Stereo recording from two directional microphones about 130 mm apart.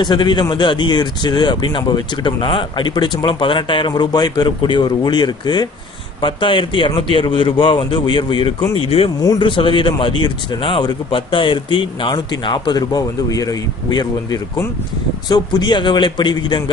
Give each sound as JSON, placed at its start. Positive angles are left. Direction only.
{"t": 0.0, "sound": "speech", "side_deg": 35}
{"t": 9.2, "sound": "speech", "side_deg": 35}